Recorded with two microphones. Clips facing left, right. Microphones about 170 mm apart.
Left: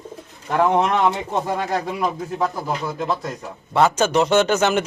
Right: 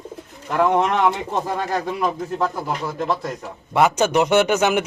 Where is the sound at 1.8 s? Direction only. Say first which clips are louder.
Right 1 dB; 10° left (ahead or behind).